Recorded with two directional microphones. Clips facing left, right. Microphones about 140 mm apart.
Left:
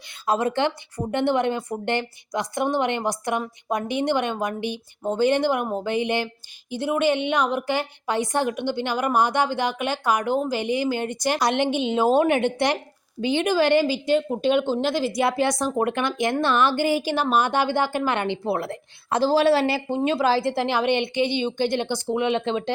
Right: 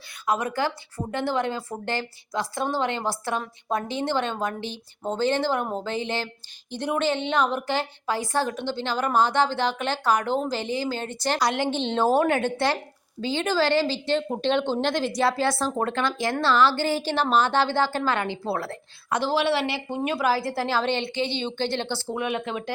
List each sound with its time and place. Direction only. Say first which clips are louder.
0.1 s a woman's voice: left 3 dB; 30° left (ahead or behind)
11.8 s a woman's voice: left 1 dB; 10° left (ahead or behind)
15.2 s a woman's voice: left 1 dB; 20° left (ahead or behind)
19.2 s speech: left 6 dB; 40° left (ahead or behind)
20.0 s a woman's voice: left 3 dB; 25° left (ahead or behind)